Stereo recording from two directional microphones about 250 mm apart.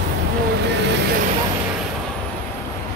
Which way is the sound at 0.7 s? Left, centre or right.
Right.